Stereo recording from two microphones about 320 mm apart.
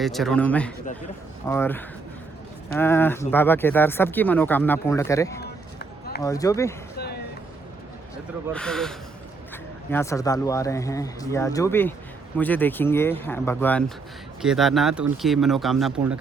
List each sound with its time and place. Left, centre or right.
0.0 s speech: centre
5.4 s run: left
6.2 s speech: centre
8.5 s speech: centre